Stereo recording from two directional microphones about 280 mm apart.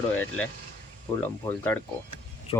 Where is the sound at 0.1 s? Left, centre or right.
Centre.